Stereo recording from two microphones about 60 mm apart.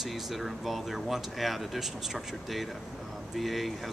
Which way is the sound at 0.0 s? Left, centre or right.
Centre.